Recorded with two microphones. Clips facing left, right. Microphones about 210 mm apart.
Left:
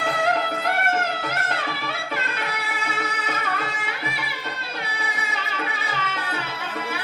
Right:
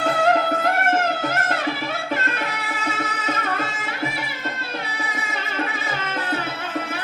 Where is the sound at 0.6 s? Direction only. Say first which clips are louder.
Right 4 dB; 45° right (ahead or behind).